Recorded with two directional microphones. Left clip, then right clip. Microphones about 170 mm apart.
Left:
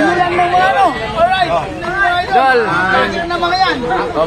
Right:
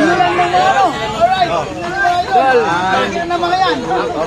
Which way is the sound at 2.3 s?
55° left (ahead or behind).